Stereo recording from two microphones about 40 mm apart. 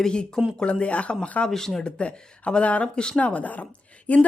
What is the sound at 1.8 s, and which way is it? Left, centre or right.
Speech, left.